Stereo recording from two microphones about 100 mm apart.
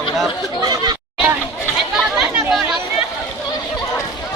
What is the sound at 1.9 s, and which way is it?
Chatter, 5° right (ahead or behind).